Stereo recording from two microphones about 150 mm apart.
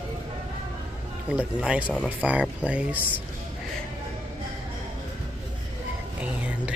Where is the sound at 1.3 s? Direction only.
10° right (ahead or behind).